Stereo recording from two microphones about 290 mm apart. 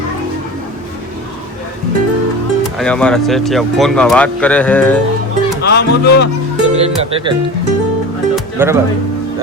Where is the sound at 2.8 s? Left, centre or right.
Centre.